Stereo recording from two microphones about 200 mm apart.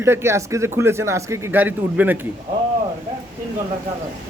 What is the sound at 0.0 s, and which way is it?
A man's voice, 10° right (ahead or behind).